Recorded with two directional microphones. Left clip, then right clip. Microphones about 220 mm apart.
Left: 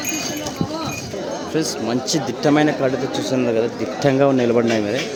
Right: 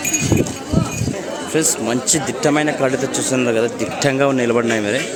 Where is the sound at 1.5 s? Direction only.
5° right (ahead or behind).